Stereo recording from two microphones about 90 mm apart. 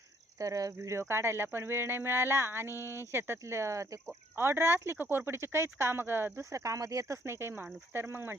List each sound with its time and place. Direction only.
0.3 s speech: 40° right (ahead or behind); by 8.4 s 25° right (ahead or behind)